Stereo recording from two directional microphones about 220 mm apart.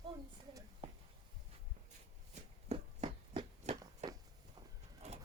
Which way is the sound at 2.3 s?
30° right (ahead or behind).